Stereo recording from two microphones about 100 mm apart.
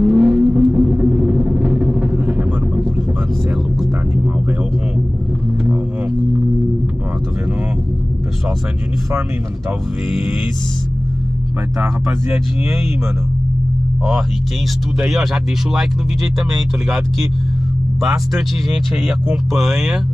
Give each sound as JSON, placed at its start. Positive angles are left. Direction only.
{"t": 0.0, "sound": "vehicle", "side_deg": -15}
{"t": 15.0, "sound": "speech", "side_deg": -5}
{"t": 18.3, "sound": "speech", "side_deg": 0}